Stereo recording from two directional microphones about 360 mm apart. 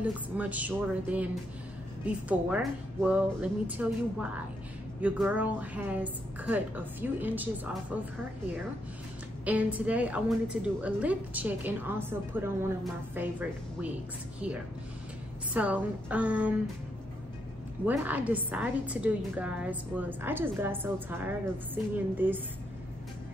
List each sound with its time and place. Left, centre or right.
0.0 s a woman's voice: centre
9.4 s a woman's voice: centre
15.5 s a woman's voice: centre
17.8 s a woman's voice: centre